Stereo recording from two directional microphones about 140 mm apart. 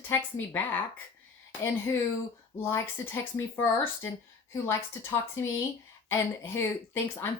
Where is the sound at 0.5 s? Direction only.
10° left (ahead or behind).